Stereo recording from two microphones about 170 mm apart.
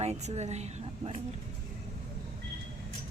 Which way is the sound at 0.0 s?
40° right (ahead or behind).